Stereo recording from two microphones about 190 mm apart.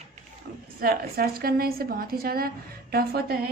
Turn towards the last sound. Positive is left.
turn(degrees=-55)  # may be behind; listen again after turning